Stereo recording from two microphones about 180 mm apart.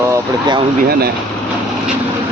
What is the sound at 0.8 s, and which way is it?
Speech, 55° right (ahead or behind).